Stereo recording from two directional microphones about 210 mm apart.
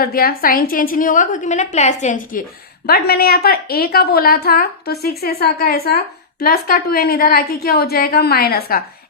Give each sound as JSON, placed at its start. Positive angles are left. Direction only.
{"t": 0.0, "sound": "a woman's voice", "side_deg": 45}